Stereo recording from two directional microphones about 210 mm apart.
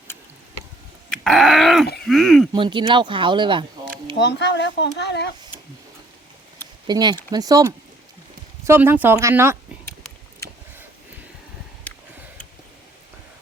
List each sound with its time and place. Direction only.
1.1 s dog: centre (ahead or behind)
2.0 s speech: centre (ahead or behind)
2.5 s speech: 25° right (ahead or behind)
4.2 s speech: 55° left (ahead or behind)
6.8 s speech: 20° right (ahead or behind)